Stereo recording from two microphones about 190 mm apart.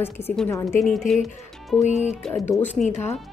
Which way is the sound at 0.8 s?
Centre (ahead or behind).